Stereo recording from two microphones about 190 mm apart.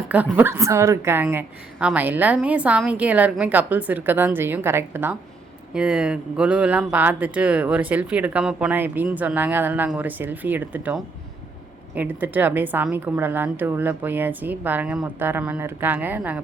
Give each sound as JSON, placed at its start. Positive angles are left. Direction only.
{"t": 0.3, "sound": "speech", "side_deg": -10}